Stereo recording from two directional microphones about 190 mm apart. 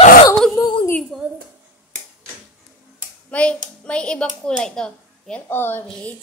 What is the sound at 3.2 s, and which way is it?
Clapping, 5° left (ahead or behind).